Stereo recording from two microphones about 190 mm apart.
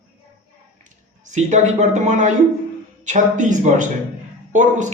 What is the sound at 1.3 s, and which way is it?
A man's voice, 40° right (ahead or behind).